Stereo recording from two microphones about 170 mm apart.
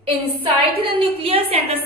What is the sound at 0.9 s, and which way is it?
Speech, 35° right (ahead or behind).